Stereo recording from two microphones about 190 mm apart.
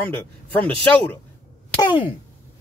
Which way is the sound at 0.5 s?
5° left (ahead or behind).